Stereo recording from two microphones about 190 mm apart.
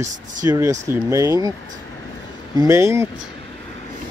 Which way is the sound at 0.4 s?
20° right (ahead or behind).